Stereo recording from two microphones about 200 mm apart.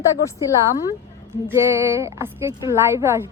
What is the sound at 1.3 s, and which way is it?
A woman's voice, 15° right (ahead or behind).